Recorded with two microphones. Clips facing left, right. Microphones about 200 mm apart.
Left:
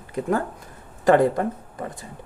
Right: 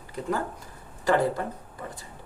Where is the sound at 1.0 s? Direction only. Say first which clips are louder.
Left 7 dB; 55° left (ahead or behind).